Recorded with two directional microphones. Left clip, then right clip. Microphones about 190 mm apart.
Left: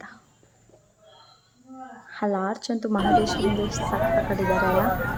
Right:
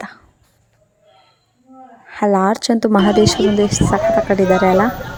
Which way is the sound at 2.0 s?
35° right (ahead or behind).